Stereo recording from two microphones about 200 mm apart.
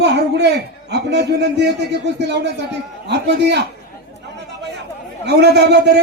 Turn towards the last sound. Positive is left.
turn(degrees=-55)  # may be behind; listen again after turning